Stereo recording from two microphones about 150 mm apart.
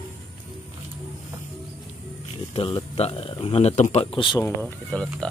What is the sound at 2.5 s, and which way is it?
Speech, 40° left (ahead or behind).